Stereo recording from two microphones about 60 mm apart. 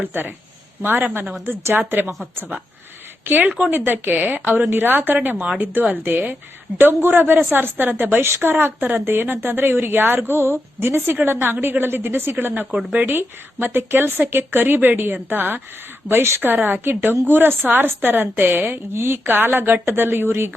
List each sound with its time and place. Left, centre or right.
0.0 s speech: right
3.2 s speech: right
16.0 s a woman's voice: right
16.6 s speech: right